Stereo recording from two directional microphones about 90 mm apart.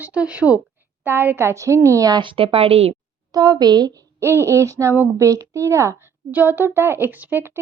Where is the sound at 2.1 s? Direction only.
65° right (ahead or behind); by 2.8 s 90° right.